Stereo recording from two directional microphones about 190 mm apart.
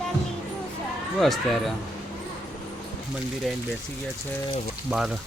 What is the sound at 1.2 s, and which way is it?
Speech, centre (ahead or behind).